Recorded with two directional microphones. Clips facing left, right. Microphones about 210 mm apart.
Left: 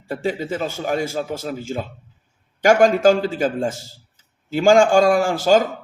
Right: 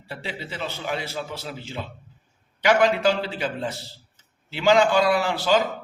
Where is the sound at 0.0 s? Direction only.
45° left (ahead or behind).